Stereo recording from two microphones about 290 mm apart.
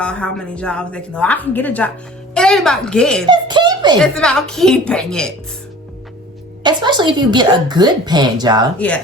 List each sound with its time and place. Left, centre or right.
0.0 s speech: centre
3.2 s giggle: centre
3.9 s speech: centre
6.6 s a woman's voice: centre